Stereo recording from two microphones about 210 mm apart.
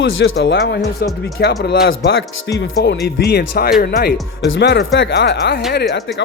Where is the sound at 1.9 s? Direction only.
60° left (ahead or behind).